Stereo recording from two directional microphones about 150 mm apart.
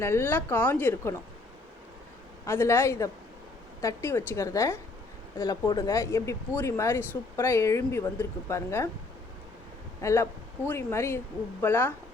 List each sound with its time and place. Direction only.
0.0 s a woman's voice: 15° left (ahead or behind)
2.5 s a woman's voice: 15° left (ahead or behind)
10.0 s a woman's voice: 20° left (ahead or behind)